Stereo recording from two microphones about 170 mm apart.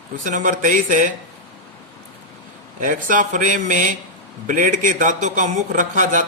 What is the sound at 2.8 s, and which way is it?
Speech, 50° right (ahead or behind).